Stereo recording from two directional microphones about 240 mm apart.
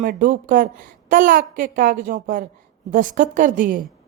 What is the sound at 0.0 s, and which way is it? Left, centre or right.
Speech, right.